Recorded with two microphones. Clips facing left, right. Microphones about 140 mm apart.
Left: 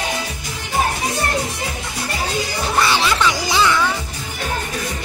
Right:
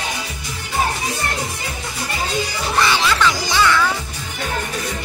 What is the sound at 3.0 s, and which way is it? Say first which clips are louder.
Music: even; 15° left (ahead or behind).